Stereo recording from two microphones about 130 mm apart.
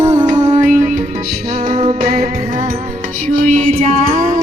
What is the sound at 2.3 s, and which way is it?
Music, 90° right.